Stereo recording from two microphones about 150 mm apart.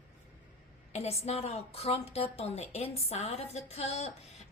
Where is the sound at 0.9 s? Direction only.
45° left (ahead or behind).